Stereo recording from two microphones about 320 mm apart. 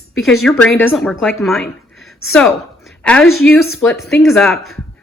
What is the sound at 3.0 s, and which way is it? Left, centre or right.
Speech, centre.